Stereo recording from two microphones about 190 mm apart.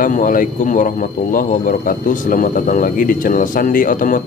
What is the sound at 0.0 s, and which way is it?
Speech, 45° left (ahead or behind).